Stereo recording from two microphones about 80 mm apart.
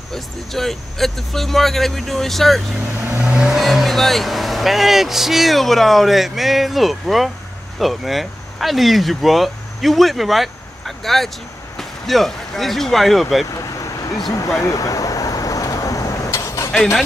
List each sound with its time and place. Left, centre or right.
0.1 s speech: centre
3.2 s speech: centre
14.6 s vehicle: left